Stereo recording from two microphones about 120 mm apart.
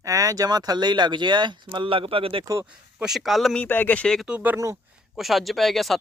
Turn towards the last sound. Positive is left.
turn(degrees=0)  # may be behind; listen again after turning